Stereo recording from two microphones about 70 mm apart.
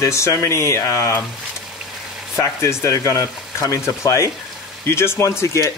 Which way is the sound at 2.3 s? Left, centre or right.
Left.